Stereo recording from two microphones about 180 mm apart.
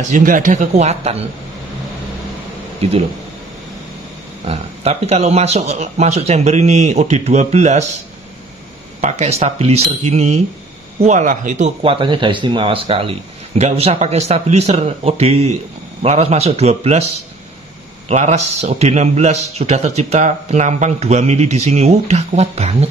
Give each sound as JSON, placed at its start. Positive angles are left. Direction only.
{"t": 0.1, "sound": "speech", "side_deg": -50}
{"t": 2.8, "sound": "a man's voice", "side_deg": -35}
{"t": 4.5, "sound": "a man's voice", "side_deg": -35}
{"t": 9.0, "sound": "a man's voice", "side_deg": -35}
{"t": 18.0, "sound": "a man's voice", "side_deg": -40}